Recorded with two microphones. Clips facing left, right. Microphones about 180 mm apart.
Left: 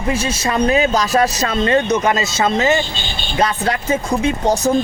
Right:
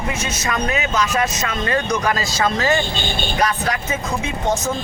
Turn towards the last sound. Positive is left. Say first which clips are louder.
# left 5 dB
turn(degrees=35)  # may be behind; listen again after turning